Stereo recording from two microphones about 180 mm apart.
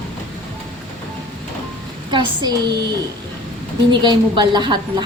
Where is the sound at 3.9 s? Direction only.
25° right (ahead or behind).